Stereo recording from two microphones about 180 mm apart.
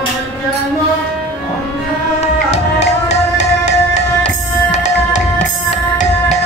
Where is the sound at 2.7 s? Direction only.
40° left (ahead or behind).